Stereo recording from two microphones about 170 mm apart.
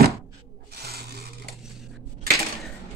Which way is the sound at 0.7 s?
70° right (ahead or behind).